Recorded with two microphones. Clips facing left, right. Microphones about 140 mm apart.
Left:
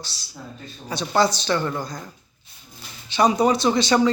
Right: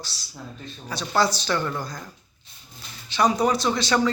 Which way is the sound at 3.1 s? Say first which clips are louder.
Left 3 dB; 20° left (ahead or behind).